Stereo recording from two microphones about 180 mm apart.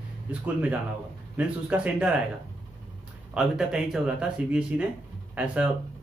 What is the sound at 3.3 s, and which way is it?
Speech, 5° right (ahead or behind).